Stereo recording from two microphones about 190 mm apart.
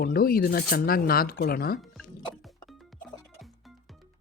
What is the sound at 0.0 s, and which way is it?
Speech, 50° left (ahead or behind).